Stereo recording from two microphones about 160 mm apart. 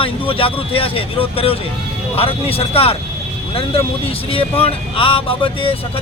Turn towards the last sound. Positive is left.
turn(degrees=35)  # may be behind; listen again after turning